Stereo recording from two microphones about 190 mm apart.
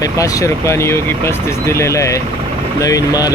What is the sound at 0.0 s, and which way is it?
Speech, 20° left (ahead or behind).